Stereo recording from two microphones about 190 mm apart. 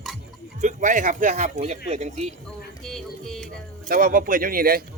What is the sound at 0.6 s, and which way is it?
Speech, 40° right (ahead or behind).